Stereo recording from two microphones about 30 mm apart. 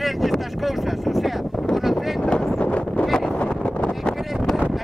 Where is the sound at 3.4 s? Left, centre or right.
Left.